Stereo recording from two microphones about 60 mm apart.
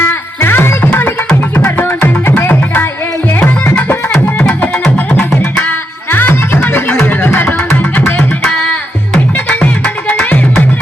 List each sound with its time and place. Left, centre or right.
0.0 s music: left
5.5 s music: left
8.4 s music: left